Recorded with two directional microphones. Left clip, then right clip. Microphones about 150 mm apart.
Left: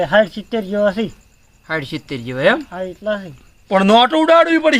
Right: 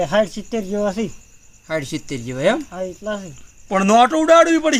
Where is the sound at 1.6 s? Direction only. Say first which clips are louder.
Left 1 dB; 10° right (ahead or behind).